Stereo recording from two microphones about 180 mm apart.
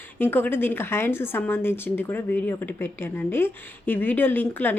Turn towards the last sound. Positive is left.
turn(degrees=10)  # may be behind; listen again after turning